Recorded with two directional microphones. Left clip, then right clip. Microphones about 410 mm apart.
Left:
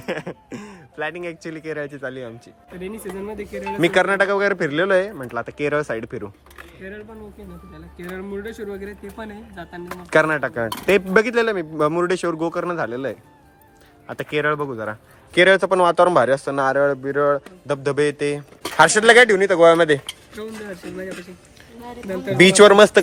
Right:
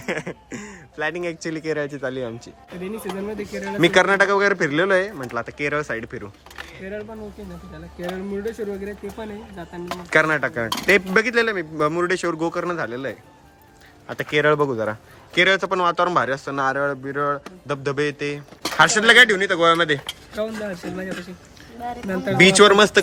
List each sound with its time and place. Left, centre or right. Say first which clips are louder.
0.0 s speech: even; centre
8.4 s a man's voice: right 3 dB; centre
20.1 s speech: right 5 dB; right
22.4 s speech: left 3 dB; centre